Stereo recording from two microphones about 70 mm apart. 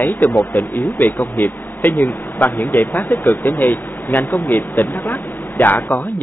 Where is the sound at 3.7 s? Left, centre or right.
Left.